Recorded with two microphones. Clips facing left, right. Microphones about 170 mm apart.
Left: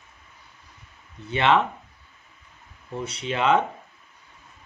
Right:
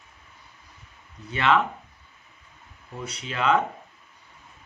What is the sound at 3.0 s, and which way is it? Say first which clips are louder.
Speech: left 2 dB; 25° left (ahead or behind).